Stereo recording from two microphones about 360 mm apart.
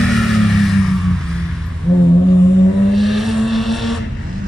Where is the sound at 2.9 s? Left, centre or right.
Centre.